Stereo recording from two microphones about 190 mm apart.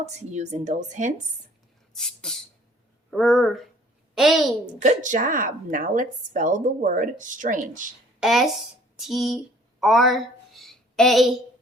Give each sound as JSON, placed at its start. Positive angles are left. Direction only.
{"t": 0.0, "sound": "a woman's voice", "side_deg": -35}
{"t": 2.0, "sound": "a woman's voice", "side_deg": 0}
{"t": 4.8, "sound": "a woman's voice", "side_deg": -40}
{"t": 8.2, "sound": "a woman's voice", "side_deg": 0}